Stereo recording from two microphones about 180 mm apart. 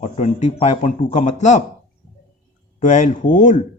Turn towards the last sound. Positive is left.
turn(degrees=45)  # may be behind; listen again after turning